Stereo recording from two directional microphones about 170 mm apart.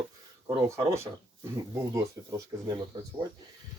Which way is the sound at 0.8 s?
15° right (ahead or behind).